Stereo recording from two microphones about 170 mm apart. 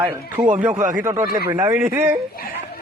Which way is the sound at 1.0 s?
15° right (ahead or behind).